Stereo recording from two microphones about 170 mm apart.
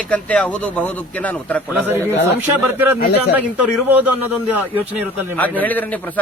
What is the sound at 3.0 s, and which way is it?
Speech, 70° left (ahead or behind).